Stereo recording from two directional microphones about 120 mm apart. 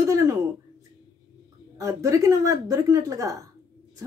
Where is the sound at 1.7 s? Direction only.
25° right (ahead or behind).